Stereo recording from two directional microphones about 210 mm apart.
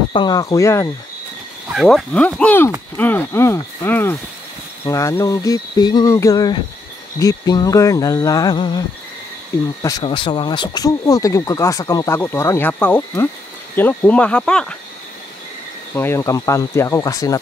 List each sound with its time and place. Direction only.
0.1 s speech: 20° left (ahead or behind)
1.7 s speech: centre (ahead or behind)
15.9 s speech: 10° left (ahead or behind)